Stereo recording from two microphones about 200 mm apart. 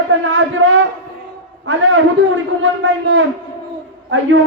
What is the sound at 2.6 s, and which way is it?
Speech, 75° right (ahead or behind).